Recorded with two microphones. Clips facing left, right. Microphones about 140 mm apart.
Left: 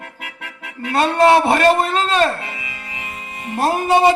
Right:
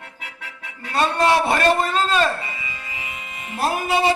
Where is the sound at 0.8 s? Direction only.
60° left (ahead or behind).